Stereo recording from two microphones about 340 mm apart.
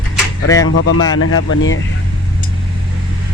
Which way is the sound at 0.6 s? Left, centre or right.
Left.